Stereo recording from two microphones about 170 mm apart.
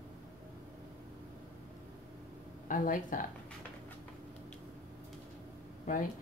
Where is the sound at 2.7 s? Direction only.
50° left (ahead or behind).